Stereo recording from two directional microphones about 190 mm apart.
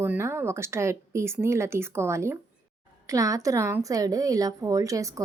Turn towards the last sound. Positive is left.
turn(degrees=-15)  # may be behind; listen again after turning